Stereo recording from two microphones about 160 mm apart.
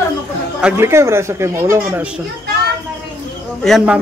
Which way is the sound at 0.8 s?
15° right (ahead or behind).